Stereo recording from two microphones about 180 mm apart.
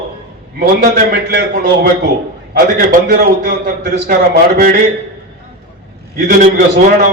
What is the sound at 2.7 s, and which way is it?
A man's voice, 55° right (ahead or behind).